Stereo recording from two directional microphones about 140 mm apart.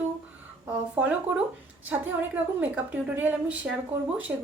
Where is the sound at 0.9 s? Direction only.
10° right (ahead or behind).